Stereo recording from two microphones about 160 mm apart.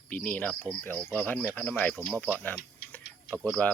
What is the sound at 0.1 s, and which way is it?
Speech, 10° left (ahead or behind).